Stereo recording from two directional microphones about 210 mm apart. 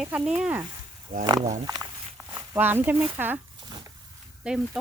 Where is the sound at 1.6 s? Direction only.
15° right (ahead or behind).